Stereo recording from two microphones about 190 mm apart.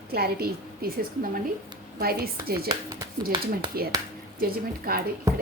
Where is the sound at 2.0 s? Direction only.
55° right (ahead or behind).